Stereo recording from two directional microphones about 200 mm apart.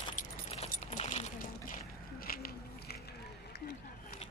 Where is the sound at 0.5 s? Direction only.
30° left (ahead or behind); by 4.2 s 50° left (ahead or behind).